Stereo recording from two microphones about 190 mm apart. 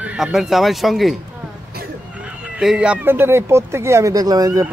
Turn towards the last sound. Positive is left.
turn(degrees=-20)  # may be behind; listen again after turning